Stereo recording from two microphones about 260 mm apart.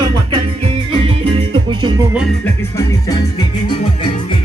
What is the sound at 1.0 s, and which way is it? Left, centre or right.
Music, right.